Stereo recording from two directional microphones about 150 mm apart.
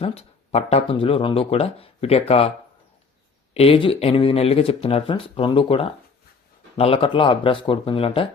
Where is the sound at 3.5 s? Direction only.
40° left (ahead or behind).